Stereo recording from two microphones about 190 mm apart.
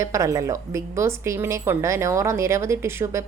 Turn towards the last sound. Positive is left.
turn(degrees=-15)  # may be behind; listen again after turning